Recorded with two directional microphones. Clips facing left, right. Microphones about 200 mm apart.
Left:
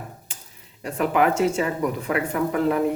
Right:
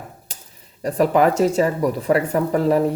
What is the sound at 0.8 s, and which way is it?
Speech, 40° right (ahead or behind).